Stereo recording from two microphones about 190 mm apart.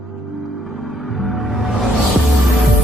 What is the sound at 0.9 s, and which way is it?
Music, centre (ahead or behind).